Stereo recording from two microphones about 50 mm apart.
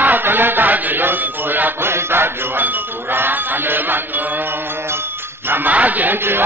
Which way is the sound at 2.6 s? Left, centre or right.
Right.